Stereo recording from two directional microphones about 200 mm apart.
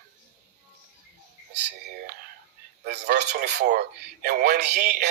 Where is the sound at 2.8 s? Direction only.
55° right (ahead or behind).